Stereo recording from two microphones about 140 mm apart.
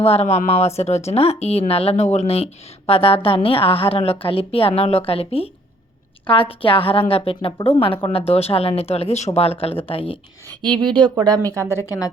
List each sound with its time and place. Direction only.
0.0 s a woman's voice: 45° left (ahead or behind)
10.8 s speech: 35° right (ahead or behind)
11.3 s speech: 20° right (ahead or behind)
11.8 s a woman's voice: 25° left (ahead or behind)